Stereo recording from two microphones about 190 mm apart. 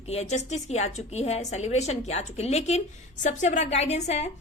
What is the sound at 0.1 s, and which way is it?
A woman's voice, 35° left (ahead or behind).